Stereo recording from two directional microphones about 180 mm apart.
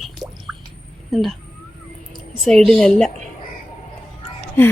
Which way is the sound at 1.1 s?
Centre (ahead or behind).